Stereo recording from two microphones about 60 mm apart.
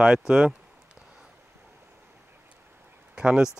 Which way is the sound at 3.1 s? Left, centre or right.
Centre.